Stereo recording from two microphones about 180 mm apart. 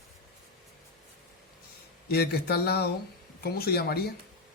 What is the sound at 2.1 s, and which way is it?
Speech, 60° left (ahead or behind).